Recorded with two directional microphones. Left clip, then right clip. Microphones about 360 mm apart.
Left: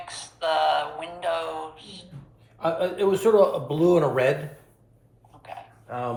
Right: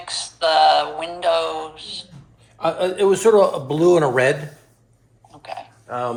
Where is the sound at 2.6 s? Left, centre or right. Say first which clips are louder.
Right 5 dB; right.